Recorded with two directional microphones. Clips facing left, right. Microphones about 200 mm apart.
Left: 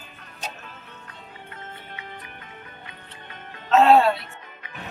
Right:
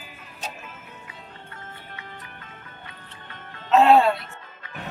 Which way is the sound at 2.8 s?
20° left (ahead or behind).